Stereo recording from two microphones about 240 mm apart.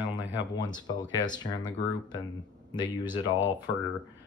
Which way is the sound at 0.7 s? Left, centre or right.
Centre.